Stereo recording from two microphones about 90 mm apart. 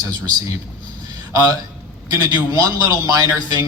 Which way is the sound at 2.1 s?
45° right (ahead or behind).